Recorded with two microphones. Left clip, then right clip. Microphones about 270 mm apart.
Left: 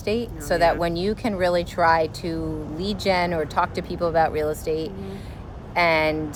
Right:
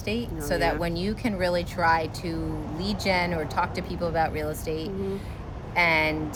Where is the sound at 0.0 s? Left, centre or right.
Centre.